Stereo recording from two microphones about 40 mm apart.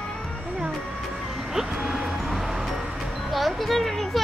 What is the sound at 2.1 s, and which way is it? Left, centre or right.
Vehicle, centre.